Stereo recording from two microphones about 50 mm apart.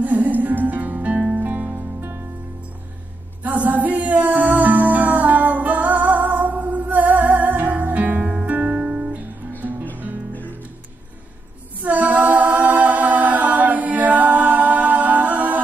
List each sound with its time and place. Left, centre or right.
0.0 s music: right
3.4 s music: right
9.5 s music: right
11.8 s a capella: right